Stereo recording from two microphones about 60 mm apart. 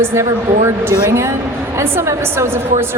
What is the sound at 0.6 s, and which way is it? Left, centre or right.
A woman's voice, right.